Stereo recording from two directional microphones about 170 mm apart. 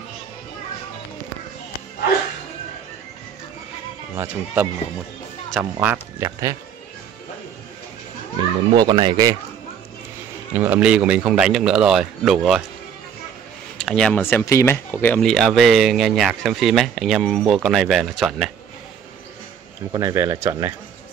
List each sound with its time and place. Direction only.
4.1 s speech: 10° right (ahead or behind)
8.7 s speech: 25° right (ahead or behind)
10.5 s speech: 10° right (ahead or behind)
13.7 s speech: 5° left (ahead or behind)
19.9 s speech: 20° right (ahead or behind)